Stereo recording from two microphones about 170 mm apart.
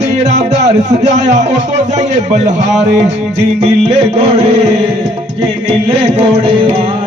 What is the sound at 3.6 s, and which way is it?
Music, 40° right (ahead or behind).